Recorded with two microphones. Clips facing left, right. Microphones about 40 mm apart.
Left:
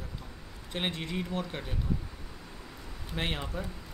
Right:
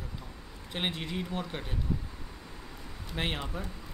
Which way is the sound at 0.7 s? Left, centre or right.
Centre.